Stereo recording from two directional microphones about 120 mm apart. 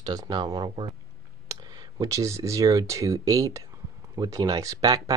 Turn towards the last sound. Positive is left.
turn(degrees=-30)  # may be behind; listen again after turning